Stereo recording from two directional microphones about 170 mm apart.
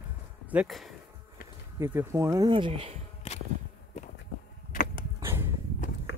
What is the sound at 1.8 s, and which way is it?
Speech, 15° right (ahead or behind).